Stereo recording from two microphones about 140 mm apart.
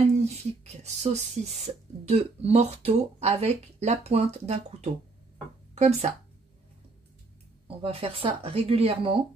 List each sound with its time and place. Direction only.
0.2 s speech: 50° right (ahead or behind)
7.6 s speech: 45° right (ahead or behind)